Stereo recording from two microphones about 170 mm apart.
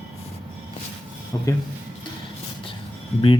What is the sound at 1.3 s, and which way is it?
Speech, 15° left (ahead or behind).